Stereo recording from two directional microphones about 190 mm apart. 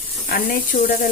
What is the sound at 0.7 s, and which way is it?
Sizzle, 50° left (ahead or behind).